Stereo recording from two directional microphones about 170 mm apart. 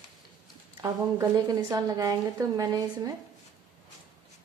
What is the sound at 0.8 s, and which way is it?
A woman's voice, 25° right (ahead or behind).